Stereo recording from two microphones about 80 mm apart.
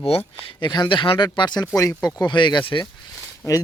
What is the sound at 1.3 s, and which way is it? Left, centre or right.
Speech, left.